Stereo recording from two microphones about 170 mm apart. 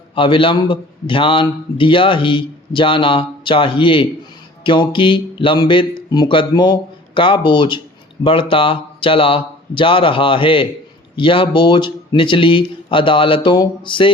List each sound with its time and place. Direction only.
0.2 s a man's voice: 30° left (ahead or behind)